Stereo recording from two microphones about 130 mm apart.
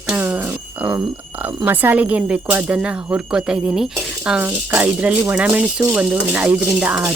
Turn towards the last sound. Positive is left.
turn(degrees=-10)  # may be behind; listen again after turning